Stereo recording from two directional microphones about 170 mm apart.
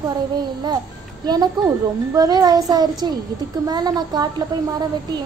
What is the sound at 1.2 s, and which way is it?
A woman's voice, 25° right (ahead or behind).